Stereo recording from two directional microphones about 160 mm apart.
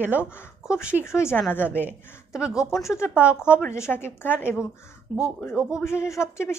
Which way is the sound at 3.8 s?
15° left (ahead or behind).